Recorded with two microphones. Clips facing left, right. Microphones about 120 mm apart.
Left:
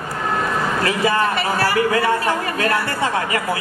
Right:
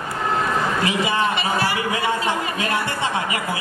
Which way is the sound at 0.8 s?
20° right (ahead or behind).